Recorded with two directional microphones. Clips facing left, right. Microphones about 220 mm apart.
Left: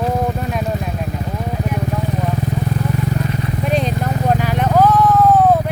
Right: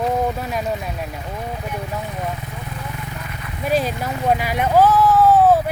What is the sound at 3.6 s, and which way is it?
Vehicle, 5° right (ahead or behind).